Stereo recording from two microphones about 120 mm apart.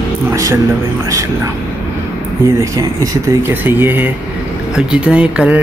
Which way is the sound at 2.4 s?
25° right (ahead or behind).